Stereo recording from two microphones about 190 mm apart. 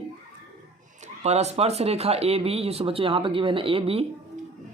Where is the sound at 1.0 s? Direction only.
35° right (ahead or behind).